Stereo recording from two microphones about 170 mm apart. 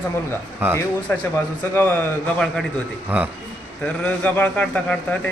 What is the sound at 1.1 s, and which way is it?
A man's voice, 15° left (ahead or behind).